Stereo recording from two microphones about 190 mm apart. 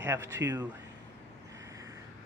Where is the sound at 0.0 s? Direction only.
15° right (ahead or behind).